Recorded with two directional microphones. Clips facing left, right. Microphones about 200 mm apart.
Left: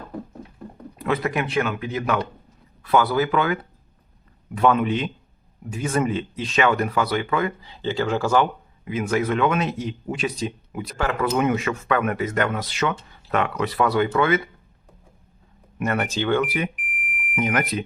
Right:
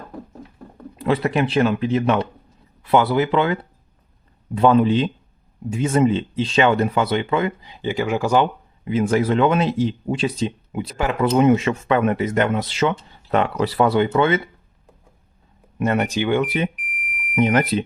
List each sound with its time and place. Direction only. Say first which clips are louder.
0.9 s speech: right 4 dB; 30° right (ahead or behind)
8.8 s speech: right 4 dB; 30° right (ahead or behind)
11.3 s speech: right 9 dB; 25° right (ahead or behind)
15.8 s speech: right 4 dB; 20° right (ahead or behind)
16.9 s smoke detector: left 1 dB; 5° left (ahead or behind)
17.3 s speech: right 6 dB; 30° right (ahead or behind)